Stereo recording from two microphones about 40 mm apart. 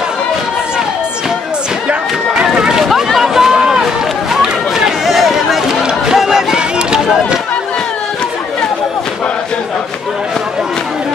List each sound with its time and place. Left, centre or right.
2.4 s run: centre
3.2 s a sound: centre
4.3 s run: centre
5.0 s run: centre